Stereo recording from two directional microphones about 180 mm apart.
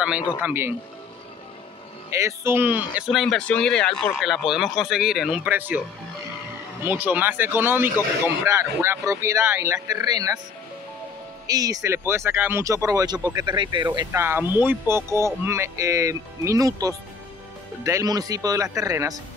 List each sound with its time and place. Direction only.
0.4 s speech: 10° right (ahead or behind)
2.1 s speech: 15° right (ahead or behind)
6.9 s speech: 10° right (ahead or behind)
11.4 s speech: 20° right (ahead or behind)
14.2 s speech: 10° right (ahead or behind)